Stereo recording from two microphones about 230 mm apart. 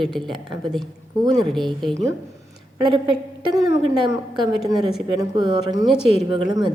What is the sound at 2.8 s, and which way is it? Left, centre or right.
A woman's voice, centre.